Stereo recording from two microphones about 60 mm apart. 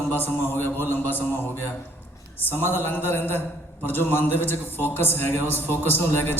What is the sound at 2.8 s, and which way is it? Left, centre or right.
A man's voice, left.